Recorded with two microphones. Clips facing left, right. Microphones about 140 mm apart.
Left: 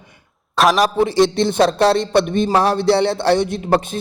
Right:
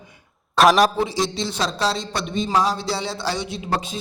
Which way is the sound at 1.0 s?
60° left (ahead or behind).